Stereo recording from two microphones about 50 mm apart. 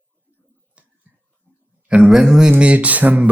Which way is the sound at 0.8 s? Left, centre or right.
Right.